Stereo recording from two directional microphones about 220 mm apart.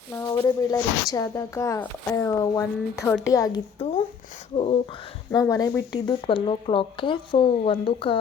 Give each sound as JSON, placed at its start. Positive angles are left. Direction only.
{"t": 0.1, "sound": "a woman's voice", "side_deg": 10}
{"t": 4.5, "sound": "a sound", "side_deg": 25}
{"t": 5.3, "sound": "speech", "side_deg": 15}